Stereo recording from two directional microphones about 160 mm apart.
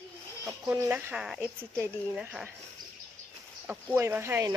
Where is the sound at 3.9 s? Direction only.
15° right (ahead or behind).